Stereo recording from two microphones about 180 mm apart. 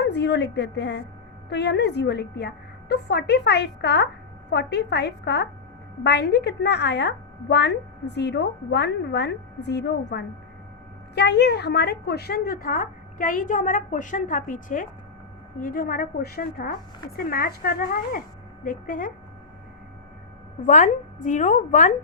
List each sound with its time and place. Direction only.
0.0 s a woman's voice: 70° left (ahead or behind); by 19.1 s 50° left (ahead or behind)
20.7 s a woman's voice: 45° left (ahead or behind)